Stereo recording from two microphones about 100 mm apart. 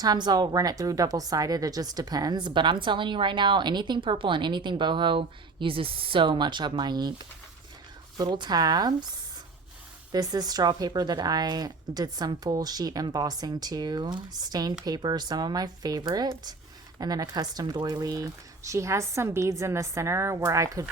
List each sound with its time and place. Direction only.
0.0 s a woman's voice: 45° right (ahead or behind)
10.1 s speech: 40° right (ahead or behind)